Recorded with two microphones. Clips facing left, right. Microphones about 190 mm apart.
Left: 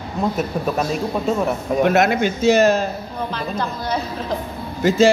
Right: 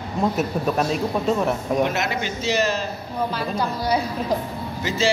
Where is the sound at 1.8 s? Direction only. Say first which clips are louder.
Left 7 dB; 55° left (ahead or behind).